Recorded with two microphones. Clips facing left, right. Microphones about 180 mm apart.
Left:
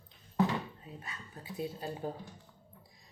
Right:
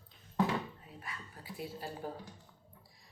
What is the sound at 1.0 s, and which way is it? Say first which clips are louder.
A woman's voice: left 1 dB; 25° left (ahead or behind).